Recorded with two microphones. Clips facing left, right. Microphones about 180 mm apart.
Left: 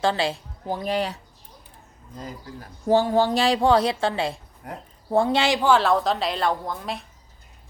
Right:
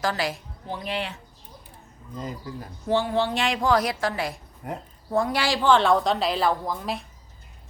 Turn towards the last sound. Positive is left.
turn(degrees=0)  # may be behind; listen again after turning